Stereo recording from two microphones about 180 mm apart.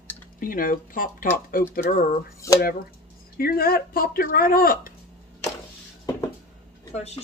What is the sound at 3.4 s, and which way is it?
Speech, 55° left (ahead or behind).